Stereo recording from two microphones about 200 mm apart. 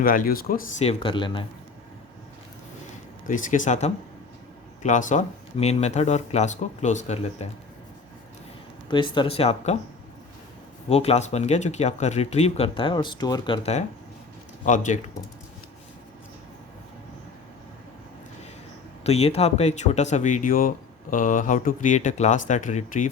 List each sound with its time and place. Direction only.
0.0 s speech: 45° left (ahead or behind)
0.9 s speech: 25° left (ahead or behind)
3.2 s speech: 40° left (ahead or behind)
8.9 s speech: 25° left (ahead or behind)
10.8 s speech: 30° left (ahead or behind)
14.6 s speech: 40° left (ahead or behind)
19.0 s speech: 30° left (ahead or behind)